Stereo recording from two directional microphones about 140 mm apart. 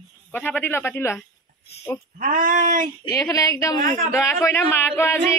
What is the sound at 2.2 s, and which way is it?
Speech, 75° right (ahead or behind).